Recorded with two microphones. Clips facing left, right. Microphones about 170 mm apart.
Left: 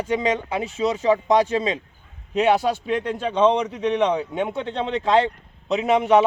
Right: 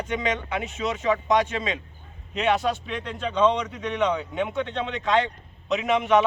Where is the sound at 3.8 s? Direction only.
30° left (ahead or behind).